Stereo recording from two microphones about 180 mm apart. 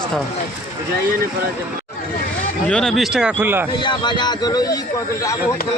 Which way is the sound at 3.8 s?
25° left (ahead or behind).